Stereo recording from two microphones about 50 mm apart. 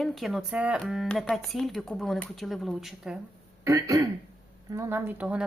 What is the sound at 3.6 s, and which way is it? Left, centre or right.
Speech, right.